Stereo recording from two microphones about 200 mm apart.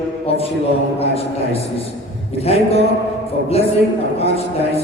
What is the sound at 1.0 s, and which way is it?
A man's voice, 30° left (ahead or behind).